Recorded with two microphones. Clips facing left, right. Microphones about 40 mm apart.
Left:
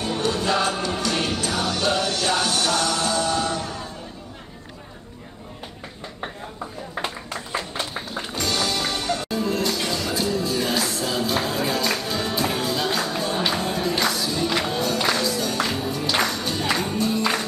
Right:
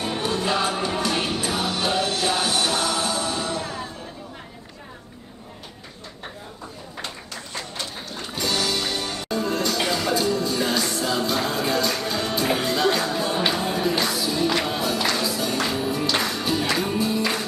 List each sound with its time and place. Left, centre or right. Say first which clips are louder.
0.0 s music: left 1 dB; centre
7.8 s music: left 3 dB; centre
9.0 s music: left 2 dB; centre
9.8 s music: right 3 dB; centre
10.1 s music: right 1 dB; centre